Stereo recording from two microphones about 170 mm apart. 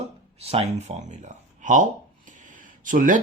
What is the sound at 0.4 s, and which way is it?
Speech, 35° right (ahead or behind).